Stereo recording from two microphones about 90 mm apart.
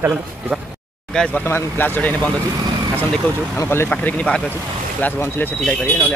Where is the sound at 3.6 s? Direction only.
25° left (ahead or behind).